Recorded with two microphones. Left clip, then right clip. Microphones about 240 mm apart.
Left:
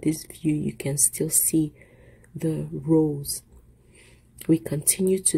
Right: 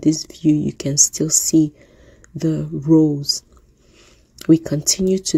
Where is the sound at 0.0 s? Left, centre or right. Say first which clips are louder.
Right 9 dB; right.